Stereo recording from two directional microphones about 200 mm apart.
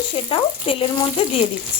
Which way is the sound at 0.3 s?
25° left (ahead or behind).